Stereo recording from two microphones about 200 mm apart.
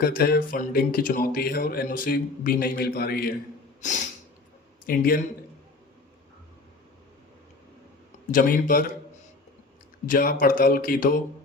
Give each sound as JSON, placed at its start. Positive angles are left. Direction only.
{"t": 0.0, "sound": "speech", "side_deg": 50}
{"t": 3.8, "sound": "snort", "side_deg": 40}
{"t": 4.9, "sound": "speech", "side_deg": 45}
{"t": 8.3, "sound": "speech", "side_deg": 40}
{"t": 10.1, "sound": "speech", "side_deg": 45}